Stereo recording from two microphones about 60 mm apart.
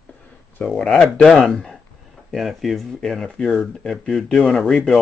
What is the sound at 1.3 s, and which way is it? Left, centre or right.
Speech, centre.